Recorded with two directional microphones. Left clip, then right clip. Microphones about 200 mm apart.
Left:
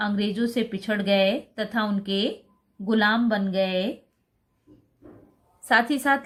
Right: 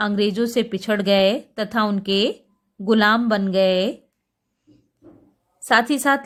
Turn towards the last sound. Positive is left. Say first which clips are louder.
# right 3 dB
turn(degrees=-40)  # may be behind; listen again after turning